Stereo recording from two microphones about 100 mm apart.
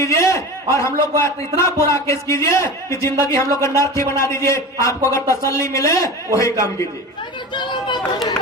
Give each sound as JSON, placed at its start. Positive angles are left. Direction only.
{"t": 0.0, "sound": "a sound", "side_deg": 30}
{"t": 1.5, "sound": "a man's voice", "side_deg": 30}
{"t": 7.5, "sound": "speech", "side_deg": 50}